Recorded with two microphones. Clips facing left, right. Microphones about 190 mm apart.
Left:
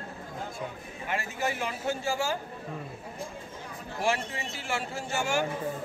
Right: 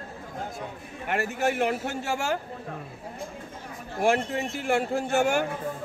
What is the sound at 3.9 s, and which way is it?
A man's voice, 55° right (ahead or behind).